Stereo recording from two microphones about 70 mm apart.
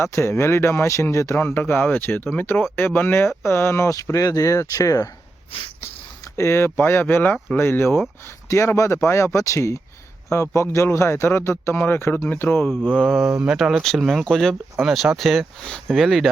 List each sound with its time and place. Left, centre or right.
0.0 s speech: left
1.4 s speech: left
4.0 s speech: left
6.3 s speech: left
13.1 s speech: centre
16.0 s speech: centre